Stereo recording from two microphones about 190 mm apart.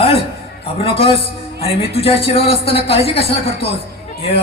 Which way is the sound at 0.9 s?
30° left (ahead or behind).